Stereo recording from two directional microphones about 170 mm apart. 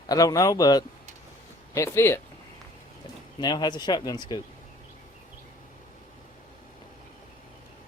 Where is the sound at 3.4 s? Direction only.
25° left (ahead or behind).